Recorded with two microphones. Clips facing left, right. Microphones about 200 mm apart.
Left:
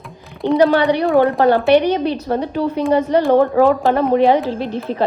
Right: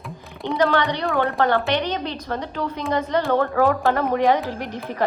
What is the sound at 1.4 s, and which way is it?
A woman's voice, 15° left (ahead or behind).